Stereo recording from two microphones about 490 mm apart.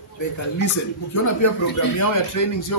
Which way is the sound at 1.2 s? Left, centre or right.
Left.